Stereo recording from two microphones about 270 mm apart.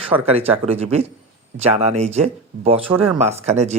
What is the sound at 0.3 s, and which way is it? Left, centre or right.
Speech, right.